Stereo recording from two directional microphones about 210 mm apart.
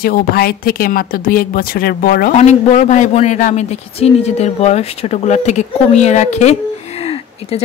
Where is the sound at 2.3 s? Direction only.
35° left (ahead or behind).